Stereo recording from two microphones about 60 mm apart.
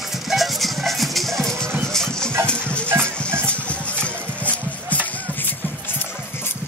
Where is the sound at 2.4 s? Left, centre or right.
Centre.